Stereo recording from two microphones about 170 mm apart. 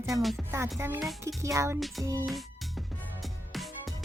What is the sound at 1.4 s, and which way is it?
Speech, 15° right (ahead or behind).